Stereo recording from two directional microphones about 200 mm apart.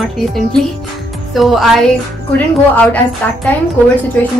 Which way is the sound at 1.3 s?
Centre (ahead or behind).